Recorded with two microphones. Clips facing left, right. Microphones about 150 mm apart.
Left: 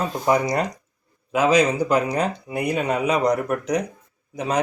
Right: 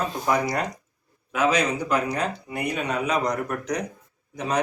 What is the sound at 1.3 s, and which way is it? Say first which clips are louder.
Speech: left 5 dB; 30° left (ahead or behind).